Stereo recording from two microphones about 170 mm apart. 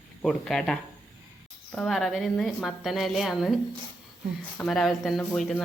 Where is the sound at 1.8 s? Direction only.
Centre (ahead or behind).